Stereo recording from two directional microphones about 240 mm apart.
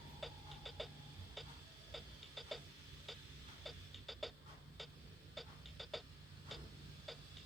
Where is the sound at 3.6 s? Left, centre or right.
Centre.